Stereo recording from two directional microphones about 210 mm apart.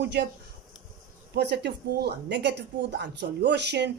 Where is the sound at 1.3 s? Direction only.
55° right (ahead or behind).